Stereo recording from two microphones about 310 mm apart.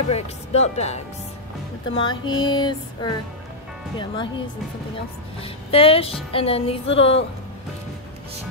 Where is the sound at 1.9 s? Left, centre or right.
Centre.